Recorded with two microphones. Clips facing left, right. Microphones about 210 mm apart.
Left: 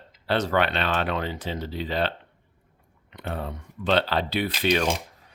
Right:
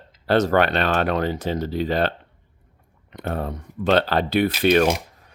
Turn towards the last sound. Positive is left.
turn(degrees=-55)  # may be behind; listen again after turning